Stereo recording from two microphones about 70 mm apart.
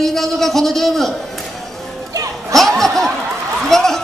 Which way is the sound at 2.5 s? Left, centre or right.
Centre.